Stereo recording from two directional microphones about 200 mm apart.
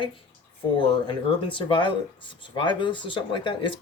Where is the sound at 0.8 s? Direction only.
25° left (ahead or behind).